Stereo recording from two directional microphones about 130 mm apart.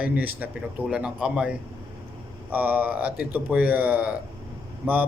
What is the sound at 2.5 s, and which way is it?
Speech, 15° right (ahead or behind).